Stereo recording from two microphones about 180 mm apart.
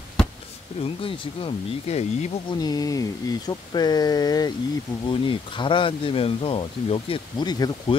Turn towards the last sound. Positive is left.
turn(degrees=25)  # may be behind; listen again after turning